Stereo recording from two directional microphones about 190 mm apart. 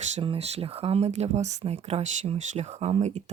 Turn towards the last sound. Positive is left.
turn(degrees=-35)  # may be behind; listen again after turning